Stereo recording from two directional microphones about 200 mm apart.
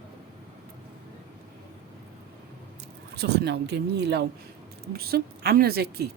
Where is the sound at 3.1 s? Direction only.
55° right (ahead or behind).